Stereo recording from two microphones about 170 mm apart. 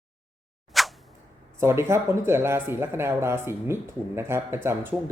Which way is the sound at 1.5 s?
15° right (ahead or behind).